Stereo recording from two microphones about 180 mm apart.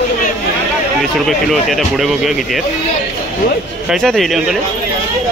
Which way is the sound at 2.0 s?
Centre (ahead or behind).